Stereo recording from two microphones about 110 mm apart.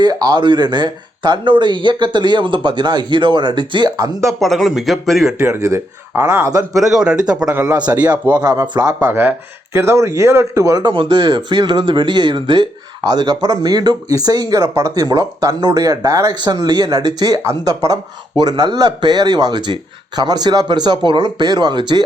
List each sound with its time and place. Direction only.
0.0 s speech: 35° right (ahead or behind)
4.3 s speech: centre (ahead or behind)
5.5 s speech: 30° right (ahead or behind)
6.7 s speech: centre (ahead or behind)
7.7 s speech: 40° right (ahead or behind)
9.0 s speech: 20° right (ahead or behind)
10.8 s speech: 45° right (ahead or behind)